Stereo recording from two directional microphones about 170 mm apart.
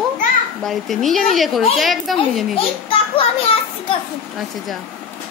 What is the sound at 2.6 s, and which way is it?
A child's voice, 30° left (ahead or behind).